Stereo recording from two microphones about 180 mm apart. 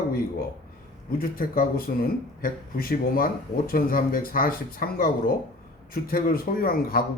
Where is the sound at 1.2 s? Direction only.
55° left (ahead or behind).